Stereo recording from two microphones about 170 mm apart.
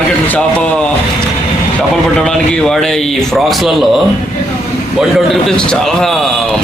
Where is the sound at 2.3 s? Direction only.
5° left (ahead or behind).